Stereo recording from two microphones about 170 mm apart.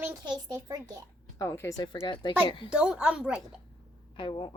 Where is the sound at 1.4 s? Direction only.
15° left (ahead or behind).